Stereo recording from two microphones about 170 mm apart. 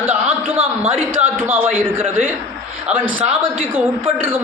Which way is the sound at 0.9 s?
10° right (ahead or behind).